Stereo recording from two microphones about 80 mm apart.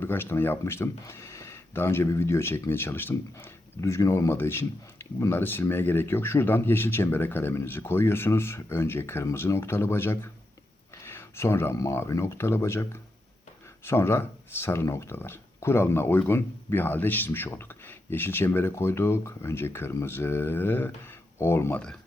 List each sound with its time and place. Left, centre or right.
0.0 s speech: left
3.8 s speech: left